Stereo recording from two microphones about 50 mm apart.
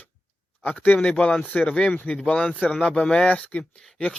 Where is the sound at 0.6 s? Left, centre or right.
Left.